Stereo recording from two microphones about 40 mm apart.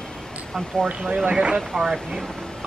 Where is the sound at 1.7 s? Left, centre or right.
Centre.